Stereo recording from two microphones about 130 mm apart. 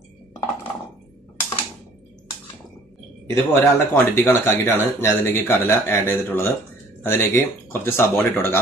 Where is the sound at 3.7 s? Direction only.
20° left (ahead or behind).